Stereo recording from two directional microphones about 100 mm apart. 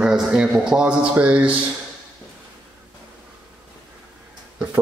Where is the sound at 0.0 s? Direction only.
10° right (ahead or behind).